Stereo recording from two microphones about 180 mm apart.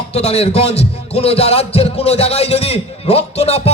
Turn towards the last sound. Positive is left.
turn(degrees=35)  # may be behind; listen again after turning